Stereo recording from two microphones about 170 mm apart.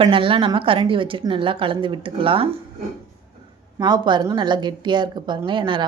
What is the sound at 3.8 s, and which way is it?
A woman's voice, 25° right (ahead or behind).